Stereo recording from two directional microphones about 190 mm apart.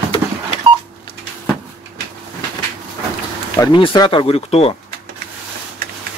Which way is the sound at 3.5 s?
20° left (ahead or behind).